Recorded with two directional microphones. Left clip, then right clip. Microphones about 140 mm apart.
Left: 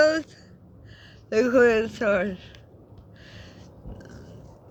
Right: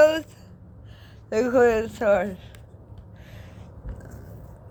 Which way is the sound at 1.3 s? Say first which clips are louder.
Even; 35° left (ahead or behind).